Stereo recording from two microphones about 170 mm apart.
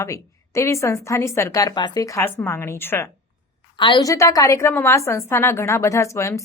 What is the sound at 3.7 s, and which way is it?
Speech, 30° left (ahead or behind).